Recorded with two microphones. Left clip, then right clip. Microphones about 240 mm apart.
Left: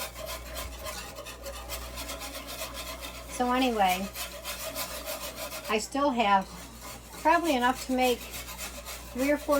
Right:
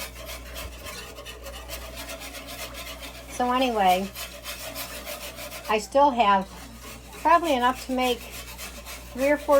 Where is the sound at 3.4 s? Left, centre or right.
Centre.